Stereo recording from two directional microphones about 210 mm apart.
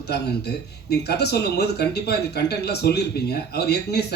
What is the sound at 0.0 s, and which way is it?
Speech, 50° left (ahead or behind).